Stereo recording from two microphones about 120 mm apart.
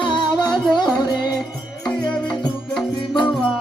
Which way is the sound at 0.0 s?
40° left (ahead or behind).